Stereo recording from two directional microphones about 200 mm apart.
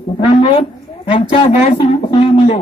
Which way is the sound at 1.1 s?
30° left (ahead or behind).